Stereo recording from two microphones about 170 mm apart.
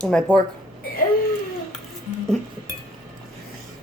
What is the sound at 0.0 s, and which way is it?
Speech, 5° left (ahead or behind).